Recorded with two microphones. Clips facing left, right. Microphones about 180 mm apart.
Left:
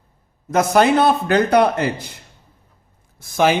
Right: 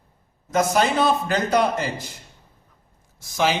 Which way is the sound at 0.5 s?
60° left (ahead or behind).